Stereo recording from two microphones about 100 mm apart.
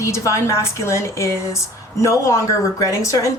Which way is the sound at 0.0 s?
30° left (ahead or behind).